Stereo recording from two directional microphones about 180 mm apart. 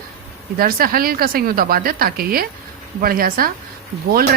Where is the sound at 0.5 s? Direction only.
55° right (ahead or behind).